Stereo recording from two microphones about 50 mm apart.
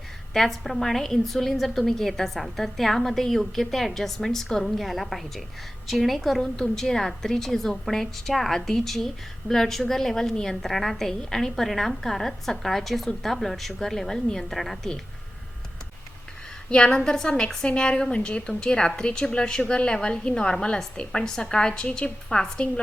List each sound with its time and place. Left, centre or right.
0.3 s a woman's voice: centre
16.6 s a woman's voice: centre